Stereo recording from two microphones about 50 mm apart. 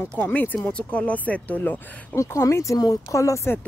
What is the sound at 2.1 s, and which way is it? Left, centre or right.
Speech, left.